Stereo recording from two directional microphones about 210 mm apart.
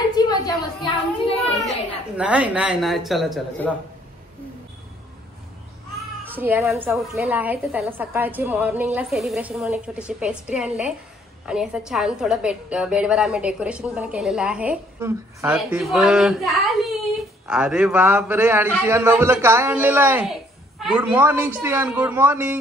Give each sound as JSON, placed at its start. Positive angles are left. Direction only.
{"t": 0.1, "sound": "a sound", "side_deg": 20}
{"t": 1.6, "sound": "a woman's voice", "side_deg": -5}
{"t": 6.2, "sound": "a woman's voice", "side_deg": -10}